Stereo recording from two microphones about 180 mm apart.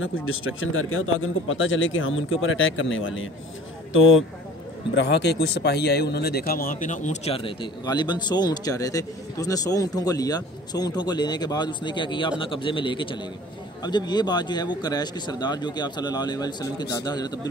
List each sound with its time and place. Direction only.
0.0 s a man's voice: 90° left
4.9 s speech: 75° left (ahead or behind); by 17.4 s 20° left (ahead or behind)